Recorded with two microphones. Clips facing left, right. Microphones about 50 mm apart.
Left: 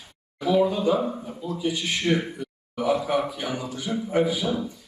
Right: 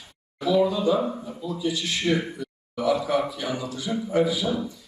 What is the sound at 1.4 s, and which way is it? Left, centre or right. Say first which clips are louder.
Speech: even; left.